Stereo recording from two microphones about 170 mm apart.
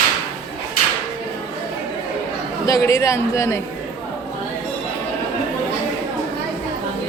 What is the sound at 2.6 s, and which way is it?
Speech, 20° left (ahead or behind).